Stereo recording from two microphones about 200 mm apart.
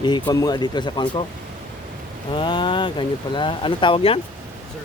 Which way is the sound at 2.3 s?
25° left (ahead or behind).